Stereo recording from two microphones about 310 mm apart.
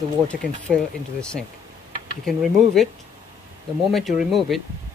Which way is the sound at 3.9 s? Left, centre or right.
Centre.